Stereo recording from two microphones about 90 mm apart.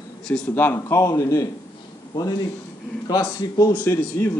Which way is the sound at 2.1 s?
45° left (ahead or behind).